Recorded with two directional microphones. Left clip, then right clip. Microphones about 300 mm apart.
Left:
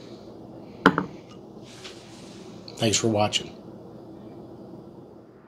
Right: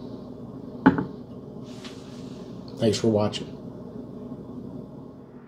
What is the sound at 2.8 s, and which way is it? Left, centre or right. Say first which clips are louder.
Speech: even; left.